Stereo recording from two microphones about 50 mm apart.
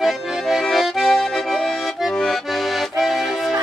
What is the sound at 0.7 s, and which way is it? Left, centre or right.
Accordion, centre.